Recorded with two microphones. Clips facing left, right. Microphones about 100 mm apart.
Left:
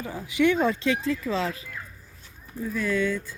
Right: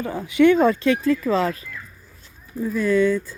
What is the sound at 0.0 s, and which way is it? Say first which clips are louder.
Speech: right 7 dB; 60° right (ahead or behind).